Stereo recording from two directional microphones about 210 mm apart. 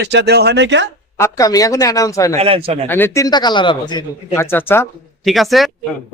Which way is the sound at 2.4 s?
25° right (ahead or behind).